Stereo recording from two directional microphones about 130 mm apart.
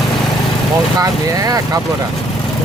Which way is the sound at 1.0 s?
25° right (ahead or behind).